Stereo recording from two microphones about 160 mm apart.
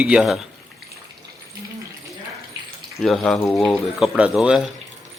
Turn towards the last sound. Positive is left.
turn(degrees=-5)  # may be behind; listen again after turning